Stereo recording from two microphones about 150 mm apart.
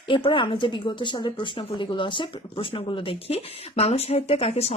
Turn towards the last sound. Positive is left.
turn(degrees=40)  # may be behind; listen again after turning